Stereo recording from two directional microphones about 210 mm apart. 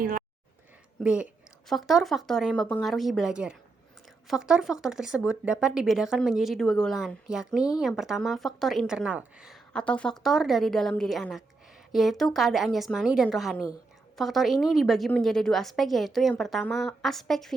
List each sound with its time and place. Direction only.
0.0 s speech: 40° right (ahead or behind)
1.0 s a woman's voice: 5° right (ahead or behind)